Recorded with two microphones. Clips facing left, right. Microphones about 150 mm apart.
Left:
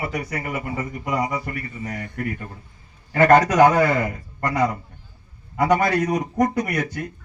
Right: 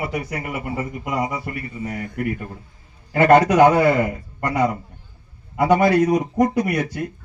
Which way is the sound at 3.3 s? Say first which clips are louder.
Right 2 dB; 30° right (ahead or behind).